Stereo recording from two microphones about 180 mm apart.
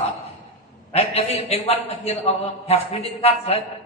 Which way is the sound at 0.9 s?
35° left (ahead or behind).